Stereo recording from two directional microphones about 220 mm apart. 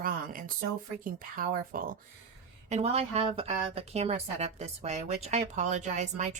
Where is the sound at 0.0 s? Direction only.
40° right (ahead or behind).